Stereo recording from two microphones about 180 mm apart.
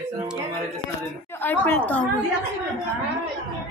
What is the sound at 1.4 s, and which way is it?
Speech, 10° left (ahead or behind).